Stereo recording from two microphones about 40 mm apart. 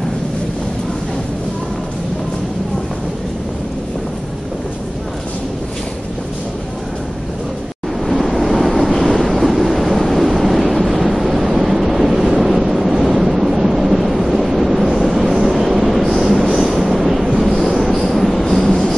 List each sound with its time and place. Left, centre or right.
8.1 s waves: centre